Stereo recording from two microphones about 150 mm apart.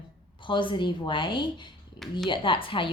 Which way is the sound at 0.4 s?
30° left (ahead or behind).